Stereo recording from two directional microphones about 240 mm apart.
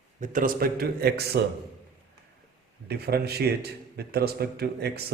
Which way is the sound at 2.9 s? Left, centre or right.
Right.